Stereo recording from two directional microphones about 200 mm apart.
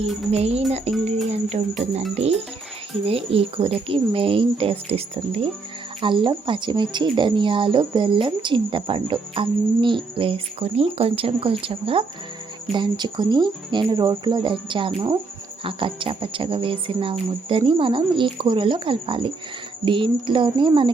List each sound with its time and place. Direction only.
0.3 s music: 30° right (ahead or behind)
3.1 s speech: 30° right (ahead or behind)